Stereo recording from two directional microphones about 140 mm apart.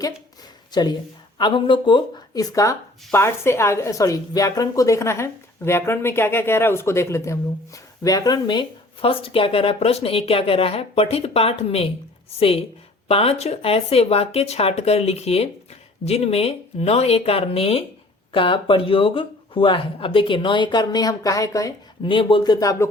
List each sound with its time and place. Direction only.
0.7 s speech: 30° left (ahead or behind)
22.0 s speech: 35° left (ahead or behind)
22.6 s speech: 25° left (ahead or behind)